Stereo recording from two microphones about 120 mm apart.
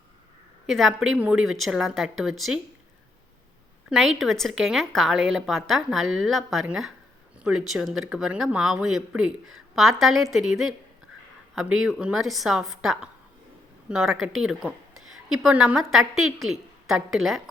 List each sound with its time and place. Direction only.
0.7 s a woman's voice: centre (ahead or behind)
3.8 s a woman's voice: centre (ahead or behind)
11.9 s a woman's voice: 5° right (ahead or behind)